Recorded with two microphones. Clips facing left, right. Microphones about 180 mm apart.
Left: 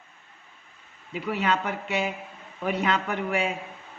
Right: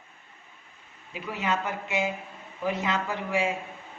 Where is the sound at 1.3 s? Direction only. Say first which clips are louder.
Left 3 dB; 65° left (ahead or behind).